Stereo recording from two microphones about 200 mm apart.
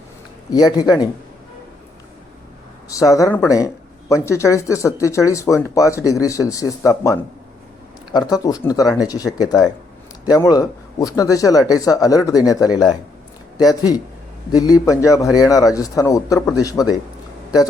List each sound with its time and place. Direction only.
0.5 s speech: 20° left (ahead or behind)
2.9 s speech: 15° left (ahead or behind)